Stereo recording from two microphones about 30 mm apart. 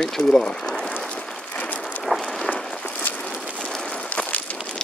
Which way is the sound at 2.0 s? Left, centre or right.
Centre.